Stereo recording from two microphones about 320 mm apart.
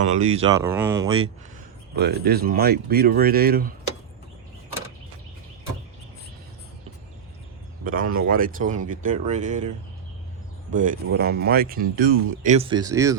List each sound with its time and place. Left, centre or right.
0.0 s speech: right
2.0 s speech: right
7.9 s speech: right
10.7 s speech: right